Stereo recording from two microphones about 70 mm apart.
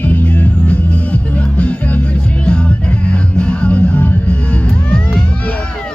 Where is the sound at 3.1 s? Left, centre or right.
Centre.